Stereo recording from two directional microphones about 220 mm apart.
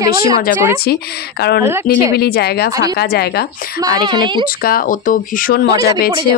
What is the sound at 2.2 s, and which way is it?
Speech, 45° left (ahead or behind).